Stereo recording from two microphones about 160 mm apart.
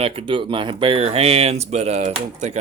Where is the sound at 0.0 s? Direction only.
35° right (ahead or behind).